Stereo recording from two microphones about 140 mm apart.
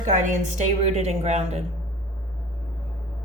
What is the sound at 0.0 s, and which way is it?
A woman's voice, 60° right (ahead or behind).